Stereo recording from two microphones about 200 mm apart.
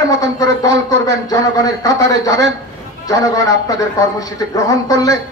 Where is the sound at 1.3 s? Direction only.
15° left (ahead or behind).